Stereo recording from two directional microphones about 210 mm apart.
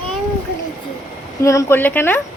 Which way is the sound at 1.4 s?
15° left (ahead or behind).